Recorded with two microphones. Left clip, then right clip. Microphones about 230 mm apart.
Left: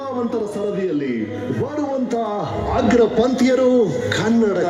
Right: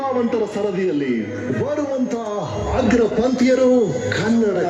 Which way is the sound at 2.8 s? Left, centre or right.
Centre.